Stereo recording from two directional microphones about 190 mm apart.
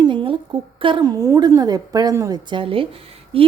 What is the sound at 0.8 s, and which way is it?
A woman's voice, 25° right (ahead or behind).